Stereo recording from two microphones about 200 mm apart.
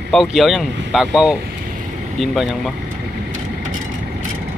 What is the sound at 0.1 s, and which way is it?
Speech, centre (ahead or behind).